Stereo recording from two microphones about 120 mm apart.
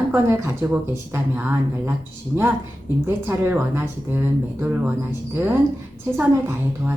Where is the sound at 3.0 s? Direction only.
20° right (ahead or behind).